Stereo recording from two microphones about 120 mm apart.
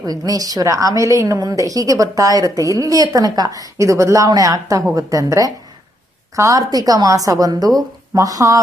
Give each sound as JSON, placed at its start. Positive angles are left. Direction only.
{"t": 0.0, "sound": "a woman's voice", "side_deg": -30}